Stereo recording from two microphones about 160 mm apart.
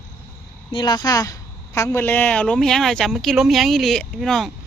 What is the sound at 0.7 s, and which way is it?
Speech, 25° left (ahead or behind).